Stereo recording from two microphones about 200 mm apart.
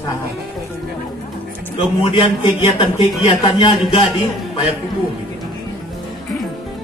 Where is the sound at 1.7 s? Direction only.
25° left (ahead or behind).